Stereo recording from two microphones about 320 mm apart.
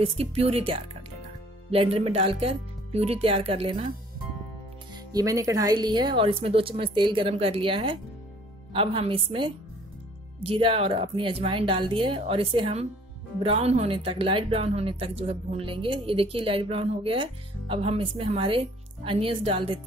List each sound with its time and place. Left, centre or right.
0.0 s speech: centre
4.9 s speech: centre